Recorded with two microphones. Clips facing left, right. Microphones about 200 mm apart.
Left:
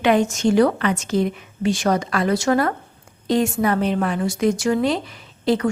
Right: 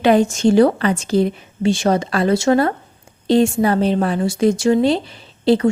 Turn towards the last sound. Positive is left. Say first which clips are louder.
# right 5 dB
turn(degrees=-30)  # may be behind; listen again after turning